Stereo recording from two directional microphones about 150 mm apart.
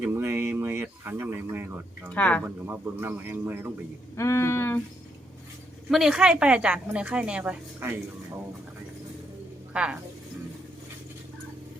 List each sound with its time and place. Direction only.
0.0 s a sound: 15° right (ahead or behind)
2.0 s speech: 10° left (ahead or behind)
2.6 s a woman's voice: 10° right (ahead or behind)
4.1 s a sound: 20° left (ahead or behind)
5.9 s a woman's voice: centre (ahead or behind)
9.7 s a woman's voice: 5° right (ahead or behind)